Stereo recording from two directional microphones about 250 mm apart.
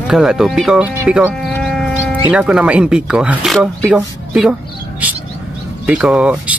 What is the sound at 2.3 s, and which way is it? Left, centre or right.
Speech, centre.